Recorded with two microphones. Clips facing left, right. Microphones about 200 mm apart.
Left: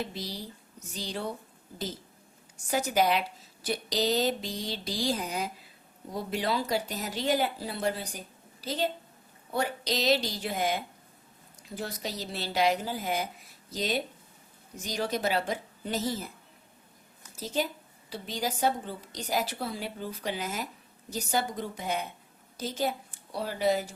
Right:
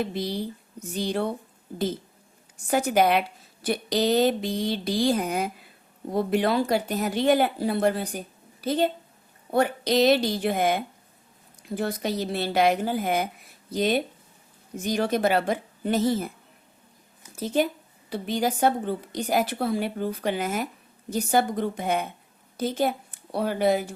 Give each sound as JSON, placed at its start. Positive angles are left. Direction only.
{"t": 0.0, "sound": "a woman's voice", "side_deg": -55}
{"t": 2.6, "sound": "a woman's voice", "side_deg": -55}
{"t": 17.3, "sound": "a woman's voice", "side_deg": -55}